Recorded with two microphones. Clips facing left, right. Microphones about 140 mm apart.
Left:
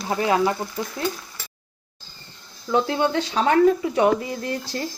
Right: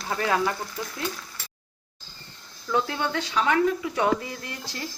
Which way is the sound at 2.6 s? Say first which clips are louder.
Left 5 dB; 25° left (ahead or behind).